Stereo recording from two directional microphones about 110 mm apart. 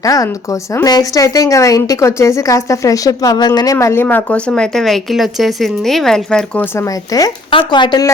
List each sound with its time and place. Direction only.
0.0 s a woman's voice: 35° left (ahead or behind)
3.8 s speech: 25° left (ahead or behind); by 6.7 s 5° left (ahead or behind)
6.7 s a woman's voice: 35° left (ahead or behind)
7.5 s speech: 45° left (ahead or behind)